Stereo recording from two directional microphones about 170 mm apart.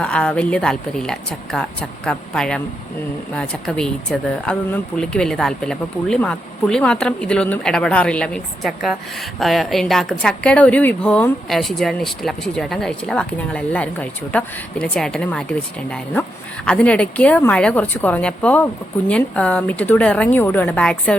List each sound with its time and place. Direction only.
0.0 s a woman's voice: 5° left (ahead or behind)
16.6 s a woman's voice: 5° left (ahead or behind)